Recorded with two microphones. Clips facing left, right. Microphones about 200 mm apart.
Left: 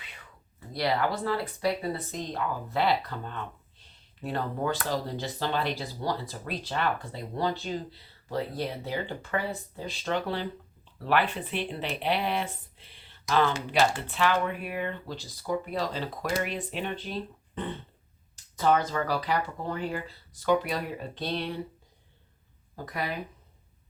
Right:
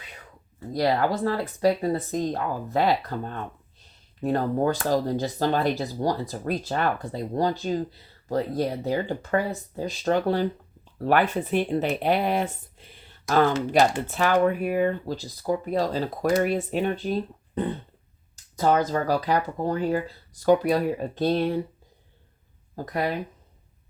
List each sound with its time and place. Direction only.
0.7 s speech: 45° right (ahead or behind)
22.7 s speech: 45° right (ahead or behind)